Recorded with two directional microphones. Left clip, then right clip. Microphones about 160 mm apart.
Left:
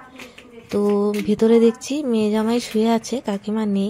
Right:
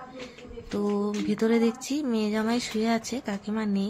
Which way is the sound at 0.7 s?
30° left (ahead or behind).